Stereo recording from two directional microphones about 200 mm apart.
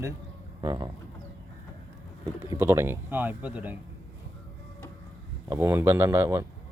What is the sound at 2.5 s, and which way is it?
Speech, 15° right (ahead or behind).